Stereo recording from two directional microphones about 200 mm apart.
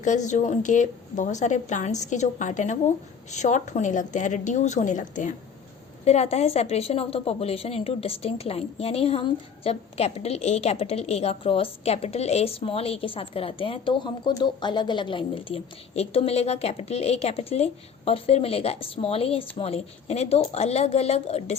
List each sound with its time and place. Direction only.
0.0 s a woman's voice: 35° left (ahead or behind)